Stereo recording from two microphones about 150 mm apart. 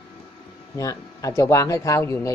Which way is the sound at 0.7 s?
20° left (ahead or behind).